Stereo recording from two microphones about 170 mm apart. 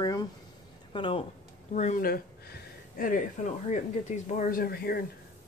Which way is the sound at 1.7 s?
45° left (ahead or behind).